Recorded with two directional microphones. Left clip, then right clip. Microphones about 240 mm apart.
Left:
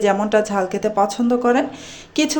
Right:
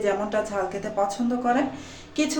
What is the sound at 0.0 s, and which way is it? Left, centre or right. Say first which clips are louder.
Speech: left 8 dB; left.